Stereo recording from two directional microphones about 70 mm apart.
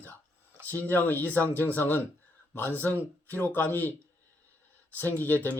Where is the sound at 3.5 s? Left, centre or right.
Left.